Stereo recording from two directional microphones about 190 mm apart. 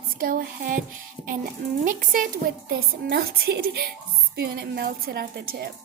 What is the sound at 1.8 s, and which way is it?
A woman's voice, 45° right (ahead or behind).